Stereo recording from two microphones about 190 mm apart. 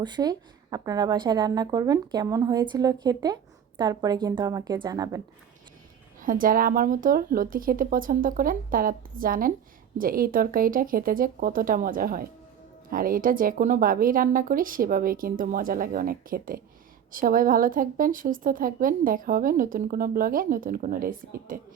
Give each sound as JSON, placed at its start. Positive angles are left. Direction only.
{"t": 0.0, "sound": "a woman's voice", "side_deg": -20}
{"t": 6.2, "sound": "a woman's voice", "side_deg": -45}